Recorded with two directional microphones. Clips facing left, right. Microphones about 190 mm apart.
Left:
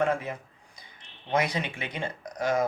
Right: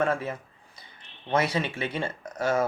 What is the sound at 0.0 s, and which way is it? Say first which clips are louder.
Speech: even; 15° left (ahead or behind).